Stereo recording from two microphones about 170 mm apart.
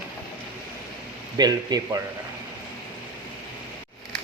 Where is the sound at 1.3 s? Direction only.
20° right (ahead or behind).